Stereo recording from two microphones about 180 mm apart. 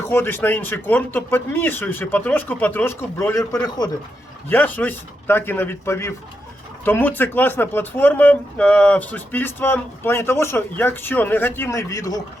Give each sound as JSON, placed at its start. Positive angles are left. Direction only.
{"t": 0.1, "sound": "speech", "side_deg": 15}
{"t": 4.4, "sound": "speech", "side_deg": 10}